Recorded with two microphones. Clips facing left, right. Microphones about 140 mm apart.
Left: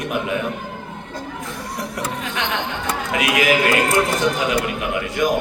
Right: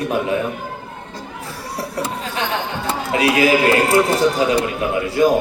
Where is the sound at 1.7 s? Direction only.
30° right (ahead or behind).